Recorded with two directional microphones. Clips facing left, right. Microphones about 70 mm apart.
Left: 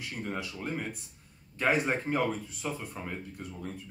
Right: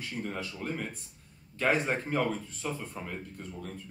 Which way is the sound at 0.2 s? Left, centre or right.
Centre.